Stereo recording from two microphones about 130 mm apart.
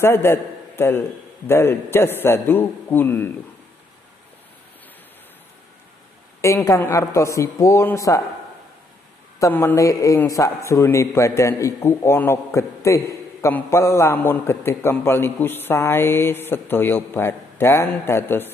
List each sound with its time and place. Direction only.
0.0 s a man's voice: 20° left (ahead or behind)
6.4 s a man's voice: 20° left (ahead or behind)
9.5 s a man's voice: 15° left (ahead or behind)
9.8 s a man's voice: 25° left (ahead or behind)